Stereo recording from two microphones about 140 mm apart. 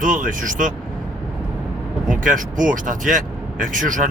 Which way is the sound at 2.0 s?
70° right (ahead or behind).